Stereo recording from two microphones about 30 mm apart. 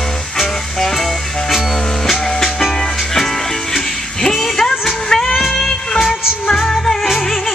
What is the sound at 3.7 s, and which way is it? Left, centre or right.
Music, centre.